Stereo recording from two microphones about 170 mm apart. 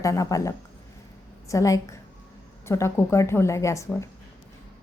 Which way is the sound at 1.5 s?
20° left (ahead or behind).